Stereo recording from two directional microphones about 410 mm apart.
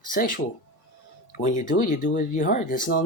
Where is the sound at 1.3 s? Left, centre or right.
Centre.